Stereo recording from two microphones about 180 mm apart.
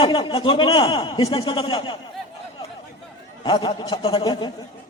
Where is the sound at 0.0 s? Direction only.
25° left (ahead or behind).